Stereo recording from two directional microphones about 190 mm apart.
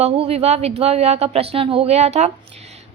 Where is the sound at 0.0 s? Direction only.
30° right (ahead or behind).